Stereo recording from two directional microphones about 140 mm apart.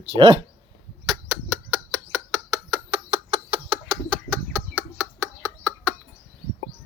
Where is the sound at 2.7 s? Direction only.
40° right (ahead or behind).